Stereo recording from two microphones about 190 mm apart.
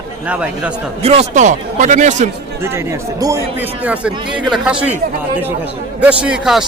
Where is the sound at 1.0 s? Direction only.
30° right (ahead or behind).